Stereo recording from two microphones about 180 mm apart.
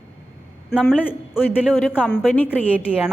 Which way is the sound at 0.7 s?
5° left (ahead or behind).